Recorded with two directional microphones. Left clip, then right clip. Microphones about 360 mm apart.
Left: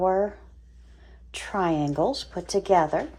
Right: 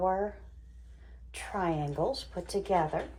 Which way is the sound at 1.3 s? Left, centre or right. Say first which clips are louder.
Left 7 dB; left.